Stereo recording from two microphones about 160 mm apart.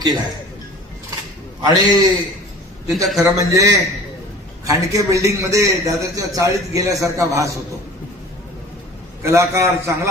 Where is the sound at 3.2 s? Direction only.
20° right (ahead or behind).